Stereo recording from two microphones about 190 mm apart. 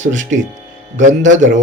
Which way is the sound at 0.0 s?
40° right (ahead or behind).